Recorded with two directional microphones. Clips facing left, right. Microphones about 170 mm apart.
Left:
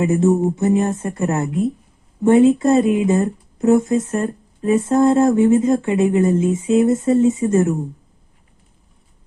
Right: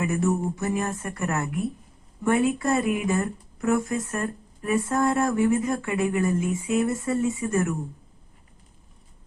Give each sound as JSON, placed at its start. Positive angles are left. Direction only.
{"t": 0.0, "sound": "speech", "side_deg": 25}